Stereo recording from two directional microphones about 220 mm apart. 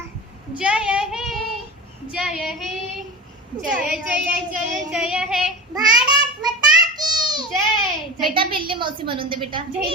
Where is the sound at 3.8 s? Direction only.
5° right (ahead or behind).